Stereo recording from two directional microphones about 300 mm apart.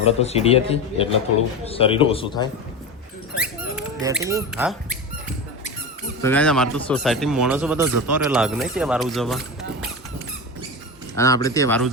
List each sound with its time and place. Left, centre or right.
0.0 s a man's voice: left
3.3 s squeak: centre
6.2 s speech: centre
11.2 s a man's voice: centre